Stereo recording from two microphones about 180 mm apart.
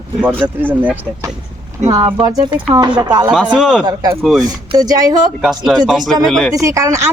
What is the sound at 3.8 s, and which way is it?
Speech, 20° right (ahead or behind).